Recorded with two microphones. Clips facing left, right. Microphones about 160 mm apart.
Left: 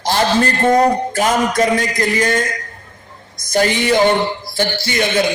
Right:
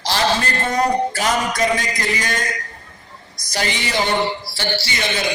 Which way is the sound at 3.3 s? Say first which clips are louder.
Left 8 dB; 50° left (ahead or behind).